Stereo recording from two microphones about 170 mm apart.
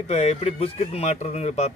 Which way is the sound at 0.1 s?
40° left (ahead or behind).